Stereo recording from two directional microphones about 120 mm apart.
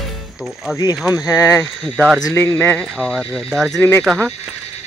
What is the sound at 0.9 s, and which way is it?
Speech, 5° right (ahead or behind).